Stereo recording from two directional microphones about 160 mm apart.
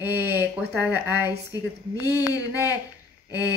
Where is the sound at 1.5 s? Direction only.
20° left (ahead or behind).